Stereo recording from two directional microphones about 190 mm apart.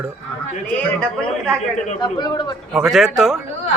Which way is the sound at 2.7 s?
Centre (ahead or behind).